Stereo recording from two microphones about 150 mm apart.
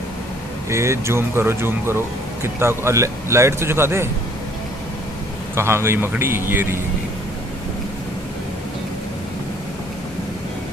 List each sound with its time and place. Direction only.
0.7 s speech: 20° right (ahead or behind)
5.5 s speech: 15° right (ahead or behind)